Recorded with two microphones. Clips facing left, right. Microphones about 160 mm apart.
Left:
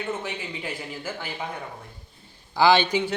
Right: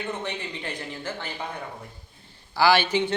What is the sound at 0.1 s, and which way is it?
Speech, 5° left (ahead or behind).